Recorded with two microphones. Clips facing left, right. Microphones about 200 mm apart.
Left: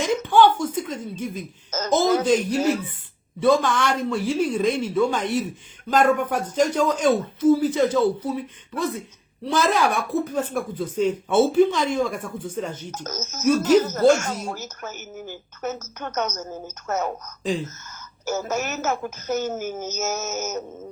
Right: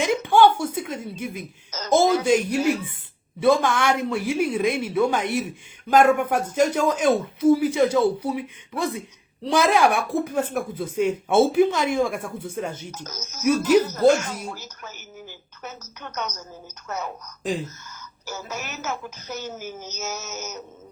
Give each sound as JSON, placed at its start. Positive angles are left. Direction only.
{"t": 0.0, "sound": "speech", "side_deg": -10}
{"t": 1.7, "sound": "a woman's voice", "side_deg": 50}
{"t": 3.4, "sound": "speech", "side_deg": -10}
{"t": 12.9, "sound": "speech", "side_deg": 45}